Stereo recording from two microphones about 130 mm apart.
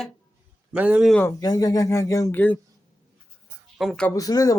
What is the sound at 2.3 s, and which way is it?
Speech, 15° left (ahead or behind).